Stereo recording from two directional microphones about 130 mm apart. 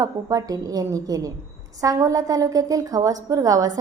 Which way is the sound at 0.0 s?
25° right (ahead or behind).